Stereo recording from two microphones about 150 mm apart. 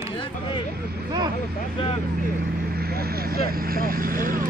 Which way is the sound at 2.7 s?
90° right.